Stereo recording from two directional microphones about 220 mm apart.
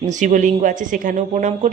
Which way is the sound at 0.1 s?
35° right (ahead or behind).